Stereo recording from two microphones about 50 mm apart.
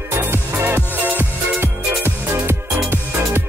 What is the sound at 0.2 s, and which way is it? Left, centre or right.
Music, right.